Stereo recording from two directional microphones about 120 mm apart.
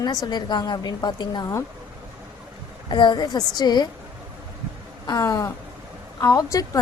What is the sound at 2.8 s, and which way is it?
A woman's voice, 40° left (ahead or behind).